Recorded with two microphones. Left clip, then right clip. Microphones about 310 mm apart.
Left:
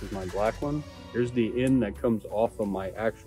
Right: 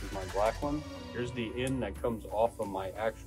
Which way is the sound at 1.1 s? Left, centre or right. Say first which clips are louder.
Left 9 dB; left.